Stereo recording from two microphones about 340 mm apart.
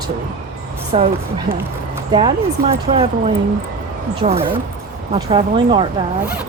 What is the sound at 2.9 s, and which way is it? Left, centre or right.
Speech, centre.